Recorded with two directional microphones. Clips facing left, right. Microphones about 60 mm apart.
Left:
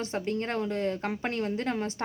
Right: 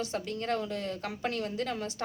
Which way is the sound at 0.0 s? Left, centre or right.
Left.